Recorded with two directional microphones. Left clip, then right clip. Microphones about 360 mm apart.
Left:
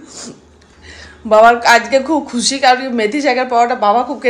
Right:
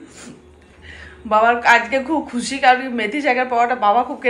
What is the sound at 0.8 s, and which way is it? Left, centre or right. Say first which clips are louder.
Speech: left 7 dB; centre.